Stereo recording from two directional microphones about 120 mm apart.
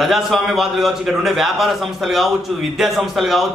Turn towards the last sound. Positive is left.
turn(degrees=0)  # may be behind; listen again after turning